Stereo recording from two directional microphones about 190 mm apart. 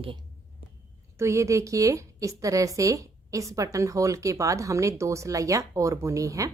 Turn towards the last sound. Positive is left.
turn(degrees=-15)  # may be behind; listen again after turning